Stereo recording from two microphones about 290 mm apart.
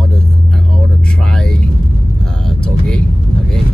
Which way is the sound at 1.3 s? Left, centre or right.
Centre.